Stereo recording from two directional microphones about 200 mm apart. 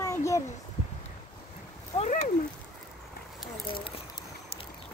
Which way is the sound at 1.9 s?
30° left (ahead or behind).